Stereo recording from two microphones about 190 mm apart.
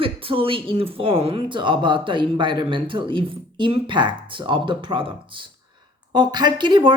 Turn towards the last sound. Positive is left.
turn(degrees=-25)  # may be behind; listen again after turning